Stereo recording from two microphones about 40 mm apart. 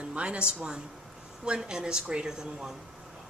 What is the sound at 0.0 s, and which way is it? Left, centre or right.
Speech, right.